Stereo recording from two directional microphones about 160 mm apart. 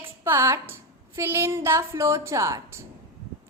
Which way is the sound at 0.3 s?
15° right (ahead or behind).